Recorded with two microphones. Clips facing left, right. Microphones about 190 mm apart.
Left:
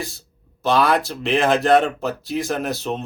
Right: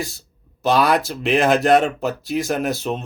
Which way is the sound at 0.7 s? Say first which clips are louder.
Right 1 dB; 40° right (ahead or behind).